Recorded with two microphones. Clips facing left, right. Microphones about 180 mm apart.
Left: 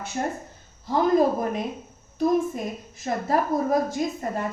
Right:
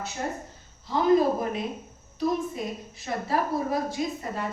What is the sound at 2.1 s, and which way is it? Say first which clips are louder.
A woman's voice: left 5 dB; 45° left (ahead or behind).